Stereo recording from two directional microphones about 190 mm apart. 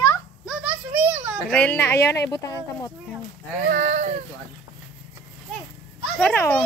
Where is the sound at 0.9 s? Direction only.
10° right (ahead or behind).